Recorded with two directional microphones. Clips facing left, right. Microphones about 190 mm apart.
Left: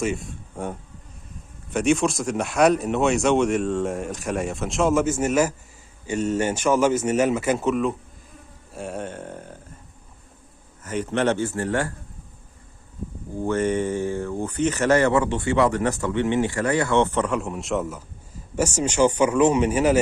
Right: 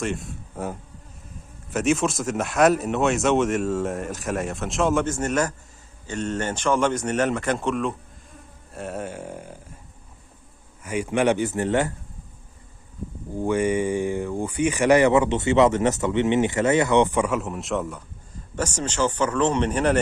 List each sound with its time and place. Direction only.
0.0 s a man's voice: centre (ahead or behind)
10.8 s speech: 10° right (ahead or behind)
13.4 s a man's voice: 10° right (ahead or behind); by 20.0 s 5° left (ahead or behind)